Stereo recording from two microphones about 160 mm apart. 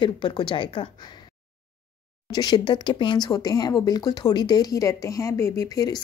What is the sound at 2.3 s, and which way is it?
Speech, 25° left (ahead or behind).